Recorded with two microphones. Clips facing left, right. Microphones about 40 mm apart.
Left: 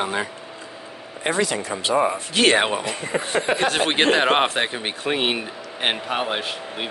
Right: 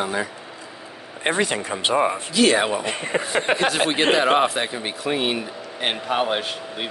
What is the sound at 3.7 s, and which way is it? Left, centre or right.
Speech, left.